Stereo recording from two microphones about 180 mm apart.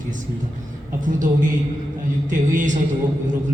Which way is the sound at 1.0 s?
45° right (ahead or behind).